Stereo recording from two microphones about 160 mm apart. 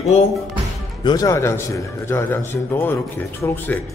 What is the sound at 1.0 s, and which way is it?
A man's voice, 25° left (ahead or behind).